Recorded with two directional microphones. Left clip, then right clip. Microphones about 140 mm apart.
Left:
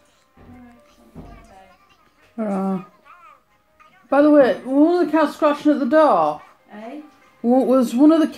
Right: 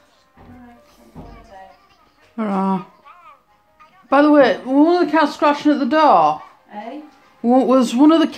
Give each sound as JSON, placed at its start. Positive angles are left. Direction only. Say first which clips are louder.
{"t": 2.3, "sound": "a sound", "louder": "right 4 dB", "side_deg": -30}
{"t": 3.1, "sound": "music", "louder": "right 3 dB", "side_deg": 35}
{"t": 4.1, "sound": "speech", "louder": "right 1 dB", "side_deg": -25}
{"t": 7.4, "sound": "speech", "louder": "right 2 dB", "side_deg": -25}